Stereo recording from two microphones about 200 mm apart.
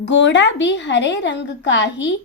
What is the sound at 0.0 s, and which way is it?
A woman's voice, 65° left (ahead or behind).